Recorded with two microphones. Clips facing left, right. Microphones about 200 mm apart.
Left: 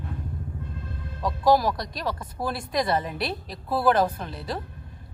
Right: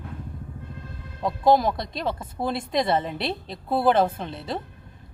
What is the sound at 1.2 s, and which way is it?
Speech, 25° right (ahead or behind).